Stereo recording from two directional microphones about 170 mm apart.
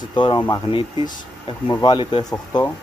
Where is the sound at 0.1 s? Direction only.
25° left (ahead or behind).